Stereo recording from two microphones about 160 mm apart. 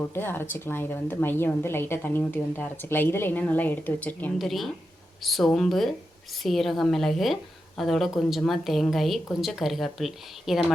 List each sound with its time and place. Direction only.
0.0 s a woman's voice: 15° left (ahead or behind)
4.4 s a woman's voice: centre (ahead or behind)